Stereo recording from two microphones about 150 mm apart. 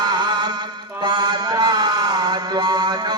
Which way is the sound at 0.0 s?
30° right (ahead or behind).